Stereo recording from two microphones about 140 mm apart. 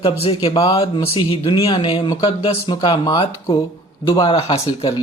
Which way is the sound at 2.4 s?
45° left (ahead or behind).